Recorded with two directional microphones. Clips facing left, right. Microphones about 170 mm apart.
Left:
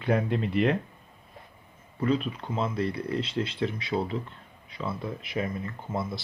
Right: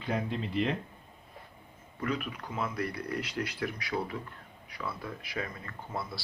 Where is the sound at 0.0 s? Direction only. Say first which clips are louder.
Left 7 dB; 60° left (ahead or behind).